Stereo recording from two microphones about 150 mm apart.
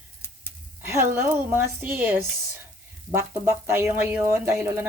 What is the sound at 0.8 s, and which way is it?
Speech, 15° right (ahead or behind).